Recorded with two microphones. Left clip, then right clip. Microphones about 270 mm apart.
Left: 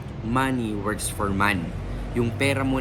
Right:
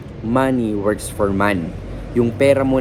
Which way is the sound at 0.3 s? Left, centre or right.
Centre.